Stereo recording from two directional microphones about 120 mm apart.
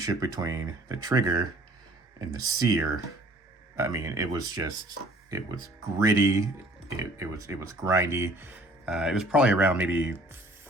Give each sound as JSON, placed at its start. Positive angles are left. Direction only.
{"t": 0.0, "sound": "speech", "side_deg": -30}
{"t": 6.0, "sound": "speech", "side_deg": -25}
{"t": 8.9, "sound": "speech", "side_deg": -5}